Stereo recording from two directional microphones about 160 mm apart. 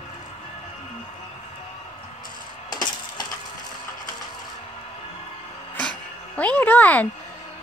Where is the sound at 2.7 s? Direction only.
25° left (ahead or behind).